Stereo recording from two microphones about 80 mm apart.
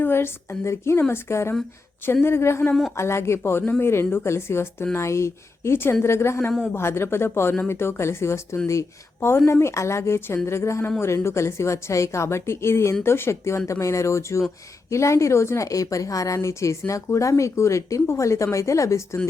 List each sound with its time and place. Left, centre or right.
0.0 s a woman's voice: left